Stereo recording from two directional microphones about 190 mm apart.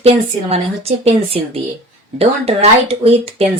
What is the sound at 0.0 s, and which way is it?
A woman's voice, 30° right (ahead or behind).